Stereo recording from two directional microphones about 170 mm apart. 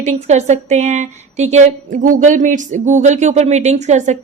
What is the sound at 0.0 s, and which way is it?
Speech, 40° right (ahead or behind).